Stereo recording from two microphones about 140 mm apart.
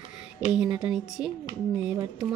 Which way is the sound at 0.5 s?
5° right (ahead or behind).